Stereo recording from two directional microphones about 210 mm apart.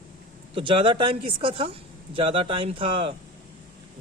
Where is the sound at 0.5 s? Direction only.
25° right (ahead or behind).